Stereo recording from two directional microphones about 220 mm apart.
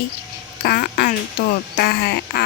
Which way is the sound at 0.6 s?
45° left (ahead or behind).